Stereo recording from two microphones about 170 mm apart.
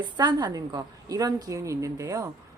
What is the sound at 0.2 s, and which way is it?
A woman's voice, 25° right (ahead or behind).